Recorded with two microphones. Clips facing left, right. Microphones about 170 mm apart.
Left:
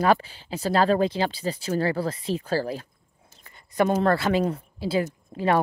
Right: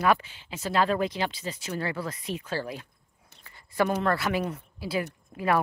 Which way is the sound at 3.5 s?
20° left (ahead or behind).